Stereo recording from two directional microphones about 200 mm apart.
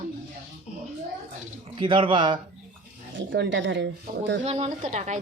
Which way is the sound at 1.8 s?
25° right (ahead or behind).